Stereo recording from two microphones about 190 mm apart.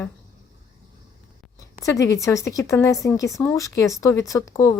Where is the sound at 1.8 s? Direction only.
15° left (ahead or behind).